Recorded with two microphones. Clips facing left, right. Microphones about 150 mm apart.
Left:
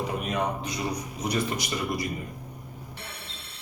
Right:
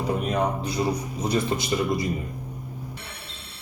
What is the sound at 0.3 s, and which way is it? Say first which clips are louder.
A man's voice: right 4 dB; 30° right (ahead or behind).